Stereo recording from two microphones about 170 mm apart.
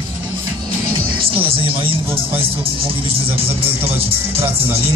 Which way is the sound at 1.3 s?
30° right (ahead or behind).